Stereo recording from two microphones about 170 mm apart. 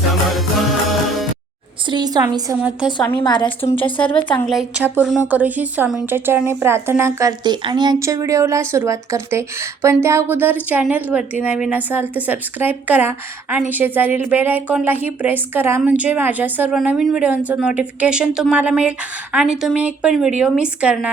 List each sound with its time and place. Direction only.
0.3 s music: centre (ahead or behind)
1.9 s a woman's voice: 25° right (ahead or behind)
3.2 s a woman's voice: 25° left (ahead or behind)
3.8 s speech: 10° left (ahead or behind)
4.4 s a woman's voice: 5° right (ahead or behind)